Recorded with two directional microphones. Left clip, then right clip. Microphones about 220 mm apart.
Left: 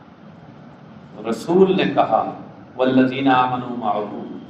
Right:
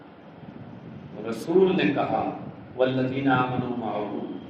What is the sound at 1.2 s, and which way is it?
A man's voice, 30° left (ahead or behind).